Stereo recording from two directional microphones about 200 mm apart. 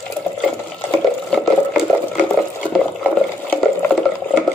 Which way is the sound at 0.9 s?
5° left (ahead or behind).